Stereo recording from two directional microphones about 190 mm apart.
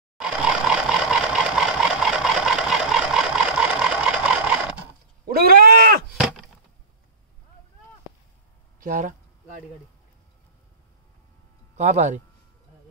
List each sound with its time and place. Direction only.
0.2 s vehicle: 5° right (ahead or behind)
5.3 s a sound: 55° right (ahead or behind)
6.1 s chop: centre (ahead or behind)
8.8 s speech: 40° right (ahead or behind)
11.7 s speech: 35° right (ahead or behind)